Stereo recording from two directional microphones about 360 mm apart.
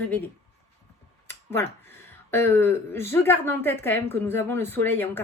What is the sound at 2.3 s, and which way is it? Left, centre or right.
A woman's voice, centre.